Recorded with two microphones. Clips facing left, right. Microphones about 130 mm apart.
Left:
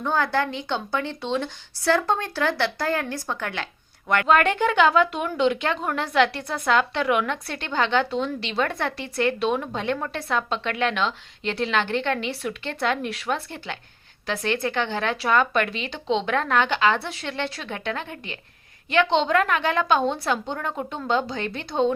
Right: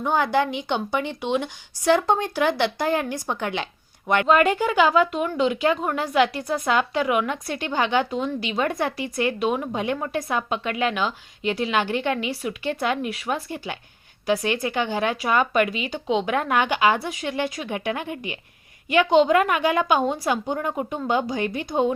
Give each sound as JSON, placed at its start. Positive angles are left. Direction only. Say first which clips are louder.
{"t": 0.0, "sound": "speech", "louder": "right 2 dB", "side_deg": -15}
{"t": 4.3, "sound": "a woman's voice", "louder": "even", "side_deg": -5}